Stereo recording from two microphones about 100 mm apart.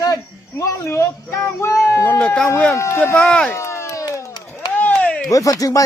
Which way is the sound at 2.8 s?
25° left (ahead or behind).